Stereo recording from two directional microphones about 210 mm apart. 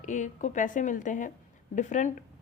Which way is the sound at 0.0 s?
35° left (ahead or behind).